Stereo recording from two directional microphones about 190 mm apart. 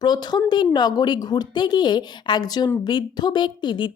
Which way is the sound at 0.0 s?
20° left (ahead or behind).